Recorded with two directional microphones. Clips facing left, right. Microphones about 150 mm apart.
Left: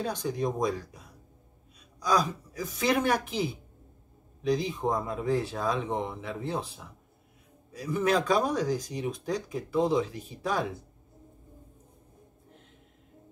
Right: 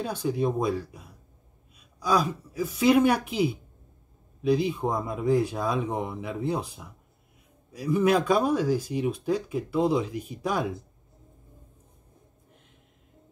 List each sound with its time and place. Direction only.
0.0 s speech: 10° right (ahead or behind)